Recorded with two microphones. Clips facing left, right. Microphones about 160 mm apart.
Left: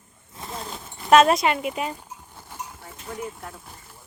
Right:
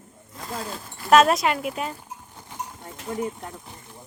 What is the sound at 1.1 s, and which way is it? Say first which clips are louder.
Speech: left 1 dB; centre (ahead or behind).